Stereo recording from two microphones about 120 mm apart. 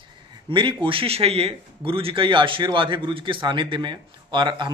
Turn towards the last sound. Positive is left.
turn(degrees=-40)  # may be behind; listen again after turning